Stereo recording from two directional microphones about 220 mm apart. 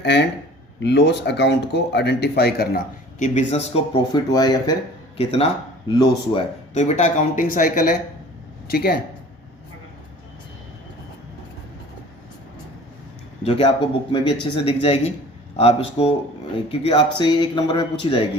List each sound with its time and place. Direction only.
0.0 s speech: 50° left (ahead or behind); by 6.4 s 20° left (ahead or behind)
6.7 s speech: 30° left (ahead or behind)
13.4 s speech: 25° left (ahead or behind)